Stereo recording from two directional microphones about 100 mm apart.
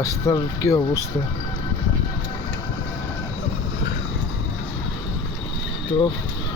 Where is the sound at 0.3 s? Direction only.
40° left (ahead or behind).